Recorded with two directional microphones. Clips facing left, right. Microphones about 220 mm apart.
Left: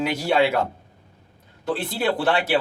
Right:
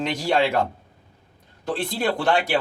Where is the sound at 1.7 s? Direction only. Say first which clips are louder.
Even; 5° left (ahead or behind).